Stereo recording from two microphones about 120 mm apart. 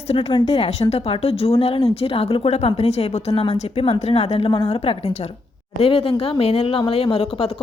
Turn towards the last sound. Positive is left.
turn(degrees=55)  # may be behind; listen again after turning